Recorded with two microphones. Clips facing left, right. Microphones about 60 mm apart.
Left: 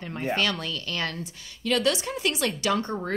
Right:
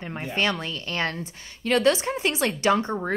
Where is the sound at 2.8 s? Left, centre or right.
Centre.